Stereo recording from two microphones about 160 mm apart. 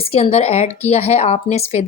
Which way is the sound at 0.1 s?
40° left (ahead or behind).